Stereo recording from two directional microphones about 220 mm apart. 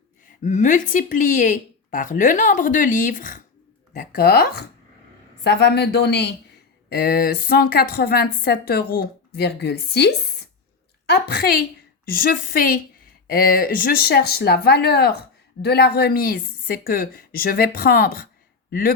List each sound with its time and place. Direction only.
0.4 s a woman's voice: 35° left (ahead or behind)